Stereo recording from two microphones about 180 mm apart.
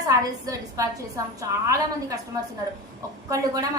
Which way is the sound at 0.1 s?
20° right (ahead or behind).